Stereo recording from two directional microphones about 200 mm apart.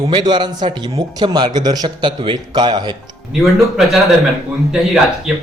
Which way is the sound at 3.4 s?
Centre (ahead or behind).